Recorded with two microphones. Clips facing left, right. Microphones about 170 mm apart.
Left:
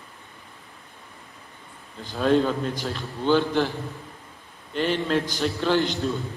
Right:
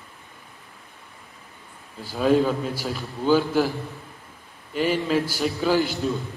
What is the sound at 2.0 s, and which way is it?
A man's voice, 5° right (ahead or behind).